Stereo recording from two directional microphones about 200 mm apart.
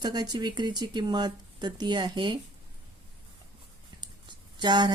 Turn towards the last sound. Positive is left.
turn(degrees=-20)  # may be behind; listen again after turning